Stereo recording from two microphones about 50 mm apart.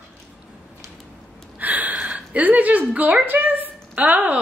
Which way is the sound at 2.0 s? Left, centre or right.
Right.